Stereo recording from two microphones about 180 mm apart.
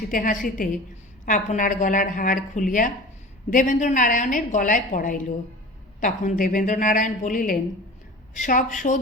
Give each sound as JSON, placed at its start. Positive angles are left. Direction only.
{"t": 0.1, "sound": "a woman's voice", "side_deg": 50}